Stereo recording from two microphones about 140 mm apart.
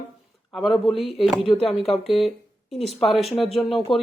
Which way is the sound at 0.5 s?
Centre (ahead or behind).